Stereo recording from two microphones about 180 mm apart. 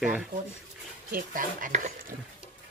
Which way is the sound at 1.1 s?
50° right (ahead or behind).